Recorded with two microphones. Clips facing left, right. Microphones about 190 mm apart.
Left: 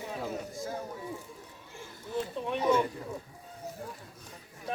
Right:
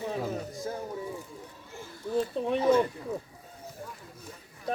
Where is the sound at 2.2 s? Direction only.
35° right (ahead or behind).